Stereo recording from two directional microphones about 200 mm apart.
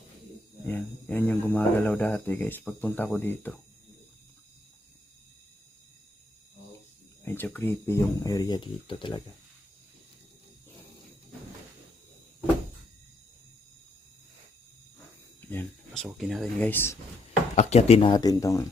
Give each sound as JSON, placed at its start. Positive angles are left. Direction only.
{"t": 0.7, "sound": "speech", "side_deg": 10}
{"t": 7.3, "sound": "speech", "side_deg": 10}
{"t": 15.4, "sound": "a sound", "side_deg": 10}
{"t": 16.0, "sound": "speech", "side_deg": 0}
{"t": 17.5, "sound": "speech", "side_deg": 35}